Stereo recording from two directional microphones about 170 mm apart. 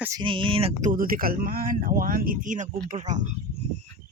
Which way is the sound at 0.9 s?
55° right (ahead or behind).